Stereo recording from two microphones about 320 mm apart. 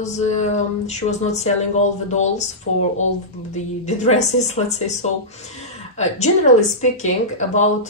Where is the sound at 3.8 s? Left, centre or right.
Left.